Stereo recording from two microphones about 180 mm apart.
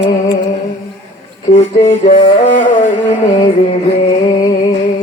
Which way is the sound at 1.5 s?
30° left (ahead or behind).